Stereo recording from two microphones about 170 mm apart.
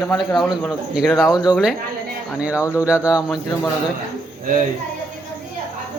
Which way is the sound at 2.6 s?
20° left (ahead or behind).